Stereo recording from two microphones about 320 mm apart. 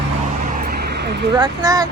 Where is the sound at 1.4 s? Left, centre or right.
Centre.